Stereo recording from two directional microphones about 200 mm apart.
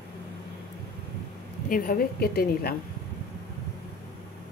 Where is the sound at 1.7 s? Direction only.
45° left (ahead or behind).